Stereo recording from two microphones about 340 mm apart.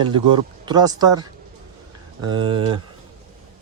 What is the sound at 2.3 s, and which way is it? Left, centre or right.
Speech, centre.